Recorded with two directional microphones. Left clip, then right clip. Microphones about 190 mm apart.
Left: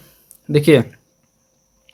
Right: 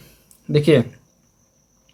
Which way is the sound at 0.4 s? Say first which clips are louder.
Left 3 dB; 35° left (ahead or behind).